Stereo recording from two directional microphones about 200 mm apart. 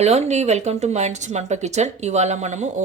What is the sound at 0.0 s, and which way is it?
Speech, 35° right (ahead or behind).